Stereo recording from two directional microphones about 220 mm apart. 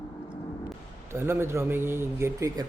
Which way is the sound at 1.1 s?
10° right (ahead or behind).